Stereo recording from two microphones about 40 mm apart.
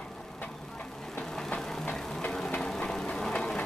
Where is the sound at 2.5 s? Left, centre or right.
Centre.